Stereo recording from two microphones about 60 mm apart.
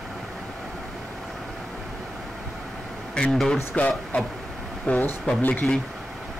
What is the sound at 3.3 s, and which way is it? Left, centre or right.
Speech, centre.